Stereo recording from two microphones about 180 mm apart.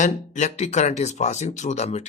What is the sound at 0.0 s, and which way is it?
Speech, 40° left (ahead or behind).